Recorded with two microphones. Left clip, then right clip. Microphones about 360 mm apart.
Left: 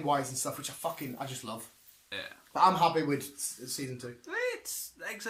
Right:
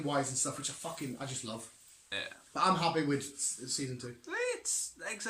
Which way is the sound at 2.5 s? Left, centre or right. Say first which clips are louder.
Left 5 dB; centre.